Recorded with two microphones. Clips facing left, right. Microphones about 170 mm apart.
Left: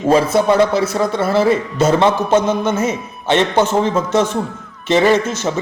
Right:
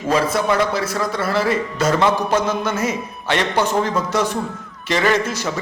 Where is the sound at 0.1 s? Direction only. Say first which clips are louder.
Left 5 dB; 25° left (ahead or behind).